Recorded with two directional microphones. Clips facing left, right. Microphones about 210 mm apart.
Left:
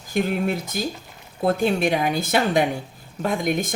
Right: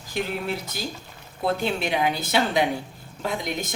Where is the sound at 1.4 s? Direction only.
45° left (ahead or behind).